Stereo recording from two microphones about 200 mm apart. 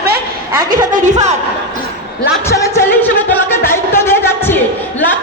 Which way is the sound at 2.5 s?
15° left (ahead or behind).